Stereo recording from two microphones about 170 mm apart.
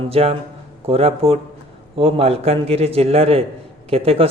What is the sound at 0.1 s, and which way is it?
A man's voice, 35° right (ahead or behind).